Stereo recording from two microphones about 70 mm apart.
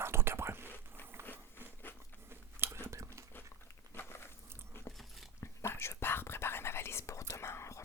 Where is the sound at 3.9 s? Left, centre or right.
Left.